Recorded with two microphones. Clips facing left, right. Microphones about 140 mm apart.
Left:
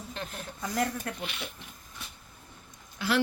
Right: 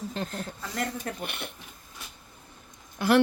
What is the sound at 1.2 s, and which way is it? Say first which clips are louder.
Speech: right 2 dB; 55° right (ahead or behind).